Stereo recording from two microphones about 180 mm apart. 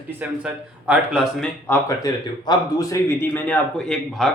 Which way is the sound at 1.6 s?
15° left (ahead or behind).